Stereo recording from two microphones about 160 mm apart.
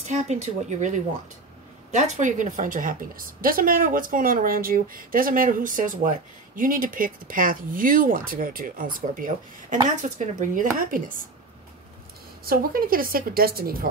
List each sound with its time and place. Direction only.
0.1 s a woman's voice: 45° right (ahead or behind)
12.4 s a woman's voice: 65° right (ahead or behind)